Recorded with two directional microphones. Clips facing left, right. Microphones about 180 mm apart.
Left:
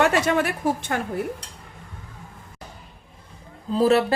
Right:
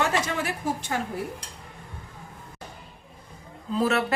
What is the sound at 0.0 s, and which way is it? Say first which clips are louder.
Speech: left 6 dB; 60° left (ahead or behind).